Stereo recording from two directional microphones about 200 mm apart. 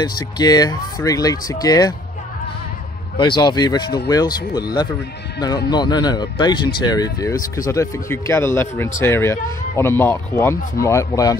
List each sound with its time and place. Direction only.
0.0 s speech: 20° left (ahead or behind)
3.2 s speech: 25° left (ahead or behind)